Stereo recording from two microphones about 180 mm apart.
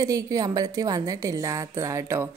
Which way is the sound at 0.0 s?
20° right (ahead or behind).